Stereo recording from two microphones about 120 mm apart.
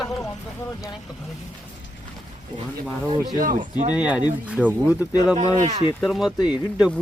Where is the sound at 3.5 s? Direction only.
80° right.